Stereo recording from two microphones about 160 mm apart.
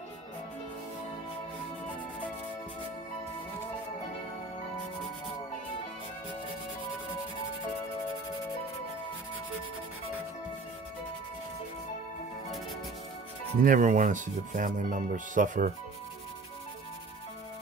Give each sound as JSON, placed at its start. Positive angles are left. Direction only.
{"t": 13.6, "sound": "speech", "side_deg": -60}